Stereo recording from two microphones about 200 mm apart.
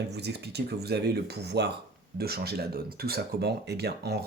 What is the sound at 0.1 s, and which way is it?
Speech, 55° right (ahead or behind).